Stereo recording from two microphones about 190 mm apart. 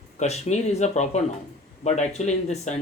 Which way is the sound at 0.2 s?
35° left (ahead or behind).